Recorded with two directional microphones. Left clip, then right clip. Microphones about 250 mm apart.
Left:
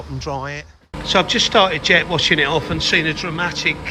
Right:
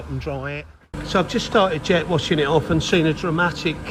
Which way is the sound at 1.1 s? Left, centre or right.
Centre.